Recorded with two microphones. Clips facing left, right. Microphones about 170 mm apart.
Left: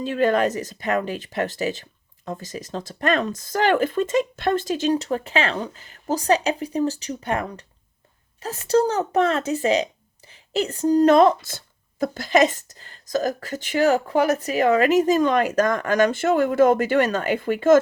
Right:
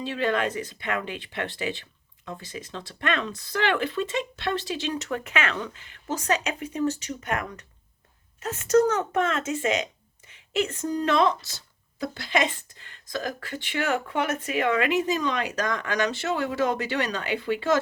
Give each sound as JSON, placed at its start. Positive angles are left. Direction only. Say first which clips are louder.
{"t": 0.0, "sound": "a woman's voice", "louder": "left 6 dB", "side_deg": 45}